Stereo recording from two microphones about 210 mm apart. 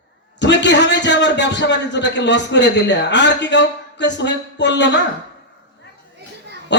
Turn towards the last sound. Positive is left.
turn(degrees=55)  # may be behind; listen again after turning